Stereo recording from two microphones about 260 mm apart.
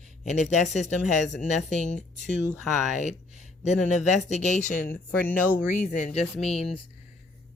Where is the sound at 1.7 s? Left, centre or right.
Left.